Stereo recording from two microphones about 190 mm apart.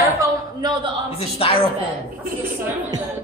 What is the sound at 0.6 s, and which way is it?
Speech, 25° right (ahead or behind).